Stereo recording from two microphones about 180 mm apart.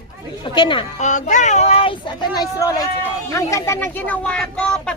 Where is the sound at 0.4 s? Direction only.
25° left (ahead or behind).